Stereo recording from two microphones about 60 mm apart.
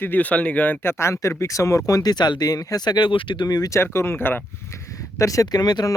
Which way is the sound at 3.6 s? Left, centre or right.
Left.